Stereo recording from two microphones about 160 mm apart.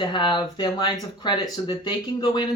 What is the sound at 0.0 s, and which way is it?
Speech, 30° left (ahead or behind).